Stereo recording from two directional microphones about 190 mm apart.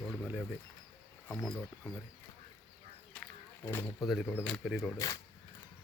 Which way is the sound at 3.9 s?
Centre (ahead or behind).